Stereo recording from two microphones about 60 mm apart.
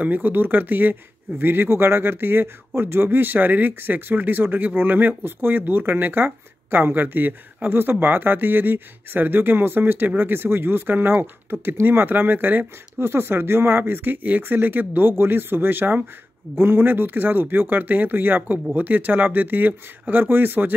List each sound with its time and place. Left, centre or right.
0.0 s speech: right